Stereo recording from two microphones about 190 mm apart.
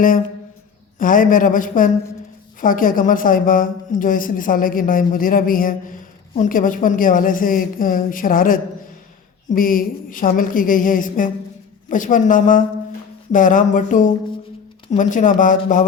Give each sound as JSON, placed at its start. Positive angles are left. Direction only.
{"t": 0.9, "sound": "a man's voice", "side_deg": 45}